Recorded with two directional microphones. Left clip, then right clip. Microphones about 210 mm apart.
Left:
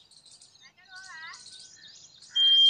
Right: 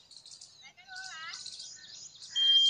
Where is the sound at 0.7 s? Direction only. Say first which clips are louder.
Right 2 dB; 45° right (ahead or behind).